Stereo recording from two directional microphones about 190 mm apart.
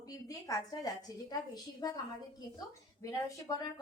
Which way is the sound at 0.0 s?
20° left (ahead or behind).